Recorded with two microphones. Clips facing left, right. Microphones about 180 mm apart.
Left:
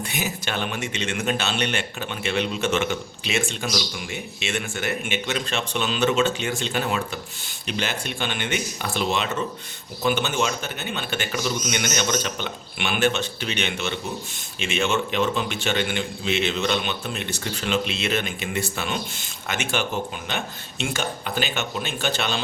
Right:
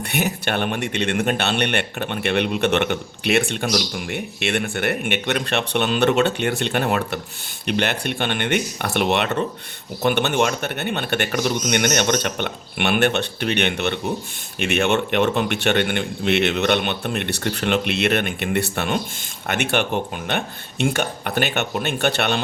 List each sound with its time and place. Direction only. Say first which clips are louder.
0.0 s speech: right 5 dB; 60° right (ahead or behind)